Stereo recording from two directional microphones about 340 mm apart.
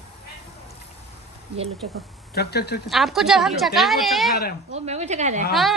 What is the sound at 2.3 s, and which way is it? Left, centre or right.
Speech, left.